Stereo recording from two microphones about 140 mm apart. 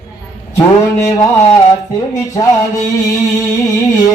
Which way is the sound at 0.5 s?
20° left (ahead or behind).